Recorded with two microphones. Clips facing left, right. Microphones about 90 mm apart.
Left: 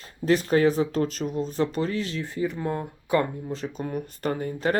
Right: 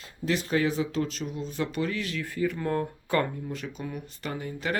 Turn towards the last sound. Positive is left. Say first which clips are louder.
# left 6 dB
turn(degrees=40)  # may be behind; listen again after turning